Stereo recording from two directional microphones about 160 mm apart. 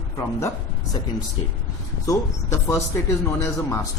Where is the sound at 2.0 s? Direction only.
20° left (ahead or behind).